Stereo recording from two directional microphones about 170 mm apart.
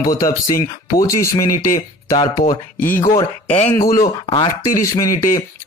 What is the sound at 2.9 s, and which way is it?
Speech, 55° left (ahead or behind).